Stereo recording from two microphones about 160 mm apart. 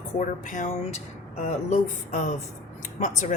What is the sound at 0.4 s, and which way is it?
A woman's voice, 50° left (ahead or behind).